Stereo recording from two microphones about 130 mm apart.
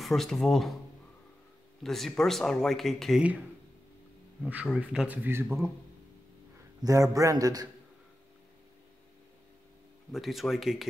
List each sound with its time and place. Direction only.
0.0 s speech: centre (ahead or behind)
1.8 s speech: centre (ahead or behind)
4.7 s a man's voice: 10° right (ahead or behind)
6.8 s a man's voice: 25° right (ahead or behind)
10.1 s speech: centre (ahead or behind)